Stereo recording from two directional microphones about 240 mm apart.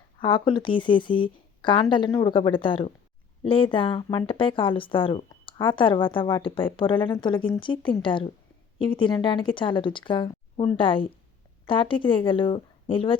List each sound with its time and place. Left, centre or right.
0.2 s speech: left